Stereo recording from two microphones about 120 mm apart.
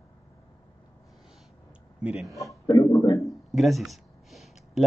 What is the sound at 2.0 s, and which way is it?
Speech, 5° right (ahead or behind).